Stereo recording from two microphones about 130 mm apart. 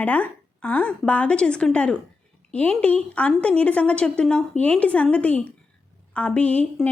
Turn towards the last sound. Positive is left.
turn(degrees=10)  # may be behind; listen again after turning